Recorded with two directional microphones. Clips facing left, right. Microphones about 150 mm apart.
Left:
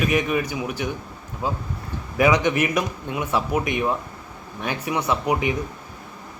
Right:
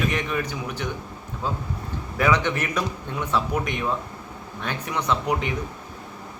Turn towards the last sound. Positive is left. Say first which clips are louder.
# left 2 dB
turn(degrees=10)  # may be behind; listen again after turning